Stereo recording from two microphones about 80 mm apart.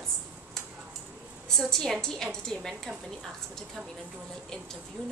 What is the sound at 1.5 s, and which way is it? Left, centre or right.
A woman's voice, centre.